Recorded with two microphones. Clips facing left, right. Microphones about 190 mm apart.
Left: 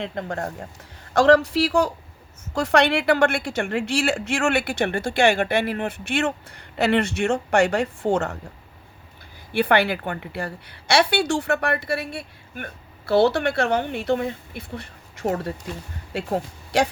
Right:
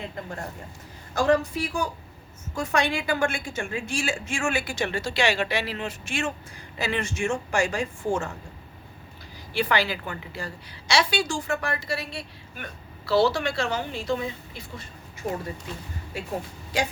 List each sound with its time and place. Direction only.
0.0 s a woman's voice: 75° left (ahead or behind)
9.5 s a woman's voice: 60° left (ahead or behind)